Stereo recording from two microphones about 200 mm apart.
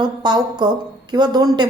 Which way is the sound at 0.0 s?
20° right (ahead or behind).